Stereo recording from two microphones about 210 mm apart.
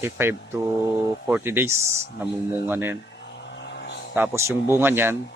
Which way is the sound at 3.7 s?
50° left (ahead or behind).